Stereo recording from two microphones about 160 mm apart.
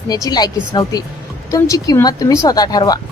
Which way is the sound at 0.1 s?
25° left (ahead or behind).